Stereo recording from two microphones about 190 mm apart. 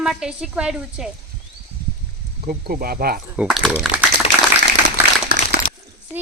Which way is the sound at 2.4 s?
50° right (ahead or behind).